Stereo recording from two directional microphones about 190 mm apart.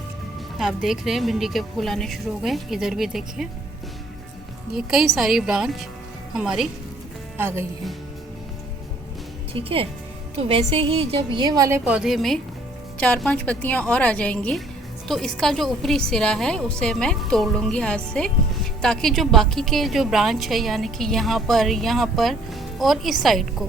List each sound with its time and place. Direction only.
0.6 s a woman's voice: centre (ahead or behind)
4.7 s a woman's voice: 5° right (ahead or behind)
9.5 s a woman's voice: 30° right (ahead or behind)
11.9 s a woman's voice: 5° right (ahead or behind)